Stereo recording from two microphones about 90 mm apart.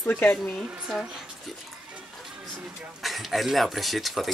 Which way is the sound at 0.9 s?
5° right (ahead or behind).